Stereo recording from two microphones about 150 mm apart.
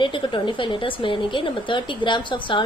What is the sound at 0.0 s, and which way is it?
Speech, 35° left (ahead or behind).